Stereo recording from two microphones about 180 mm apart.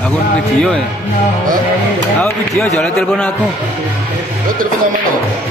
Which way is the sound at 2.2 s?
5° left (ahead or behind).